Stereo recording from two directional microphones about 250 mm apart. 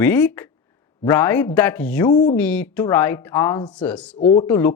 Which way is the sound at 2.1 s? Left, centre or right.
Left.